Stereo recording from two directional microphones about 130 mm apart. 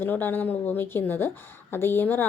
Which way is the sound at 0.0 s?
15° left (ahead or behind).